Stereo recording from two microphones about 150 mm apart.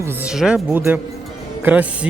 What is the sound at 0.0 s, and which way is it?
Speech, 15° right (ahead or behind).